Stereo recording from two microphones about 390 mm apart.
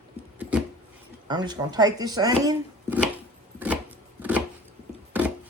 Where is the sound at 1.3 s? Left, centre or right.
Centre.